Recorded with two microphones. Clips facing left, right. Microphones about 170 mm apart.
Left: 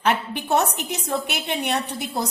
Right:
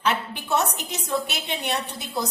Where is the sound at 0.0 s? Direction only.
60° left (ahead or behind).